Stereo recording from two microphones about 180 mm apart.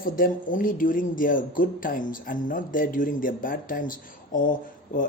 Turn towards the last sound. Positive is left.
turn(degrees=50)  # may be behind; listen again after turning